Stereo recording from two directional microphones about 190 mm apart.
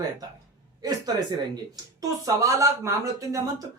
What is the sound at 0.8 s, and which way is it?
Speech, 20° right (ahead or behind).